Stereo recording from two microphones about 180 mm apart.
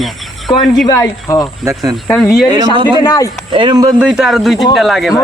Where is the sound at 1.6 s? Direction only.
20° right (ahead or behind).